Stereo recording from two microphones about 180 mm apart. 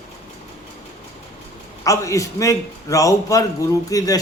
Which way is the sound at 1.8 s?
15° left (ahead or behind).